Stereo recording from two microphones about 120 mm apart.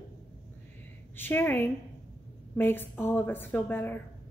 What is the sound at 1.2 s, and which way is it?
A woman's voice, 15° left (ahead or behind).